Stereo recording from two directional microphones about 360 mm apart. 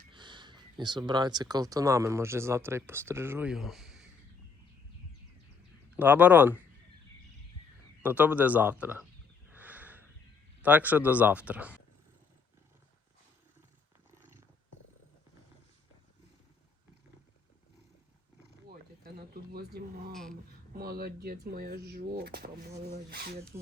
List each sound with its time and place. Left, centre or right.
0.1 s speech: centre
6.0 s speech: centre
8.0 s speech: centre
9.6 s a sound: centre
10.6 s speech: centre
18.7 s a sound: right
20.7 s speech: right